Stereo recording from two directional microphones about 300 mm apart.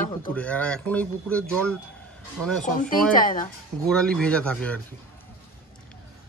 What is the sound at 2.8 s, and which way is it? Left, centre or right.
Speech, left.